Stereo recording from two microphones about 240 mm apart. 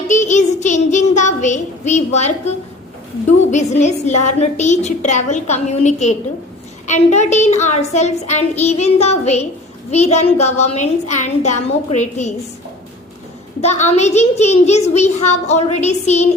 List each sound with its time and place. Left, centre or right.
0.1 s a woman's voice: left
13.6 s a woman's voice: left